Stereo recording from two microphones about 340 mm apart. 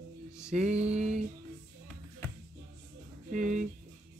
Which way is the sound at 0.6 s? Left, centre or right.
Centre.